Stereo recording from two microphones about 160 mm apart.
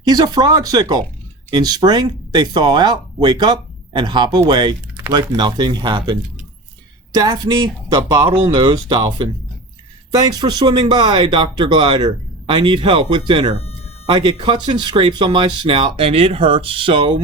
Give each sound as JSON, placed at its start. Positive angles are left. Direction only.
{"t": 0.0, "sound": "speech", "side_deg": -25}